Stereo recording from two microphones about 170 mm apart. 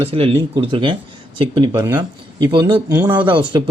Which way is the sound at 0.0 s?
35° right (ahead or behind).